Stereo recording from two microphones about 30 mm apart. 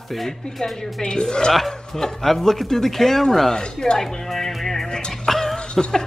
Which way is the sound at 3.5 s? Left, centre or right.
Left.